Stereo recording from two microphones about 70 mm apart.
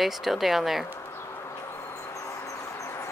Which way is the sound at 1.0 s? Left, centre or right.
Left.